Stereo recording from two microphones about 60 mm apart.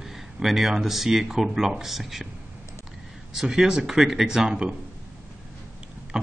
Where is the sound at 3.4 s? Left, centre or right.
Centre.